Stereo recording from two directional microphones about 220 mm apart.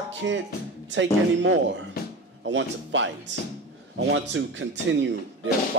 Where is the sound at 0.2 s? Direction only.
60° right (ahead or behind).